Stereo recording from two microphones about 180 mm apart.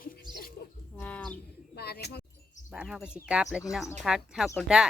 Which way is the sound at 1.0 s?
5° left (ahead or behind).